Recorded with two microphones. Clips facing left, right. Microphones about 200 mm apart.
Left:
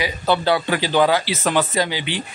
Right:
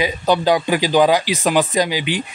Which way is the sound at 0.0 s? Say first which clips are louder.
Right 3 dB; 15° right (ahead or behind).